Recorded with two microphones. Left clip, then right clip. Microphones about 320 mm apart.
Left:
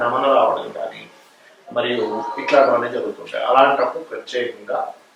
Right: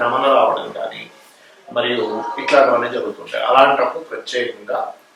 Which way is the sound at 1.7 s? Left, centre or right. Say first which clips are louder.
Right 2 dB; centre.